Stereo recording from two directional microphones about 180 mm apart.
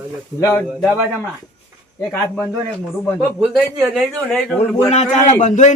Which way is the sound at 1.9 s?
15° left (ahead or behind).